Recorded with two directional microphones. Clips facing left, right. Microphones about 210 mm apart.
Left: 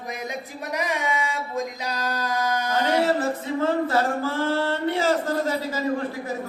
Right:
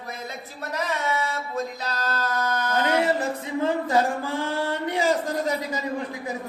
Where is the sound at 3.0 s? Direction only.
15° right (ahead or behind).